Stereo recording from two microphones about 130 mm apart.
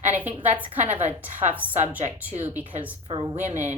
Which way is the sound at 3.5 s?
65° right (ahead or behind).